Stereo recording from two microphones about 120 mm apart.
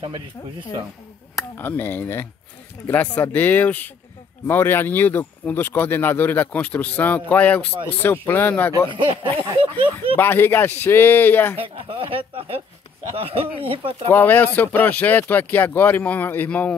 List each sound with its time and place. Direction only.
1.3 s speech: 20° left (ahead or behind)
8.9 s speech: 45° right (ahead or behind)
10.1 s speech: 20° left (ahead or behind)
11.6 s speech: 50° right (ahead or behind)
14.1 s speech: 15° left (ahead or behind)